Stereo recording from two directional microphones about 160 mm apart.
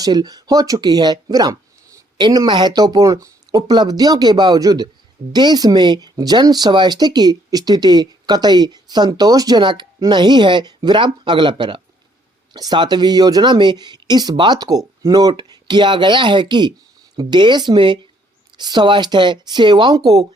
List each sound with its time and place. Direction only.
0.0 s speech: 25° right (ahead or behind)